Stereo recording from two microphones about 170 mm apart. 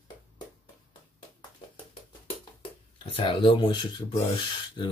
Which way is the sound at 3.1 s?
30° left (ahead or behind).